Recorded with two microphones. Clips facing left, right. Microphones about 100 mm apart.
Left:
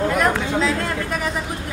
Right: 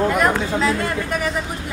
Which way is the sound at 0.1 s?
Centre (ahead or behind).